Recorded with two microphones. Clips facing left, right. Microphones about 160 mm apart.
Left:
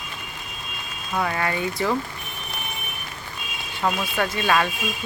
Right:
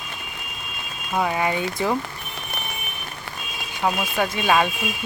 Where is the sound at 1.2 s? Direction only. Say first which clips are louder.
Right 2 dB; 15° right (ahead or behind).